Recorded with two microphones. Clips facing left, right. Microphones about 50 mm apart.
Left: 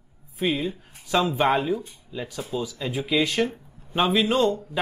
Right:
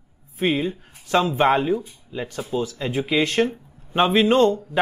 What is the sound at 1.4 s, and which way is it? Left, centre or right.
Speech, centre.